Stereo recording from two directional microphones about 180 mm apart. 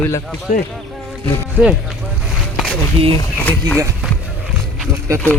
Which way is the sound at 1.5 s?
5° right (ahead or behind).